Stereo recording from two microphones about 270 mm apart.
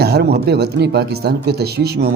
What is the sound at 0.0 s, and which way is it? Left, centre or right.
Speech, right.